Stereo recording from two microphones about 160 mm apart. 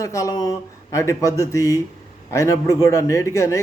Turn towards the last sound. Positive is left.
turn(degrees=20)  # may be behind; listen again after turning